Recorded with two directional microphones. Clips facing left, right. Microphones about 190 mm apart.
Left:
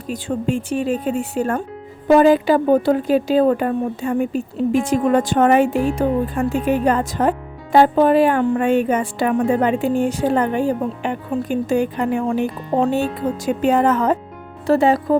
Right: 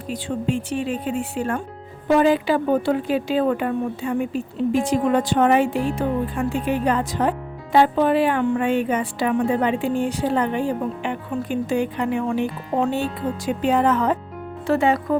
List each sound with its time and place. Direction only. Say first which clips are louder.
0.1 s speech: left 3 dB; 45° left (ahead or behind)